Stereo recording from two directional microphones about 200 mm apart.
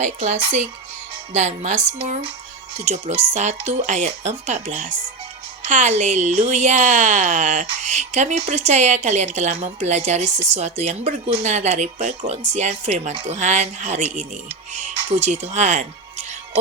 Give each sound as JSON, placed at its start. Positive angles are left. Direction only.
{"t": 0.0, "sound": "speech", "side_deg": -35}